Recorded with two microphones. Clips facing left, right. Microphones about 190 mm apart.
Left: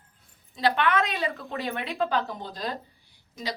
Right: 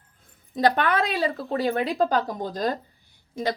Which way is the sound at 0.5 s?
45° right (ahead or behind).